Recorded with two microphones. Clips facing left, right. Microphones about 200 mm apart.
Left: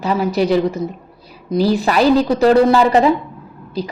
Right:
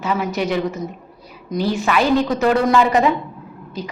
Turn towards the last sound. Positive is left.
turn(degrees=35)  # may be behind; listen again after turning